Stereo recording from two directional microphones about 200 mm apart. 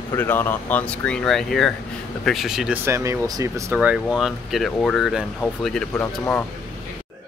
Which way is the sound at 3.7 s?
5° right (ahead or behind).